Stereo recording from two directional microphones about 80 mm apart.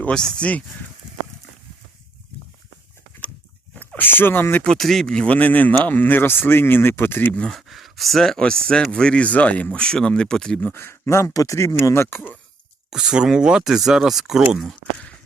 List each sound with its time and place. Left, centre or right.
0.1 s speech: centre
3.8 s speech: left
4.6 s speech: centre; by 7.3 s left
7.3 s speech: centre
10.6 s speech: left
12.9 s speech: centre
14.9 s a sound: centre